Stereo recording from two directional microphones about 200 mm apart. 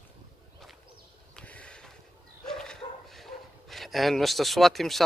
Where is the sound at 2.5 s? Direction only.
5° left (ahead or behind).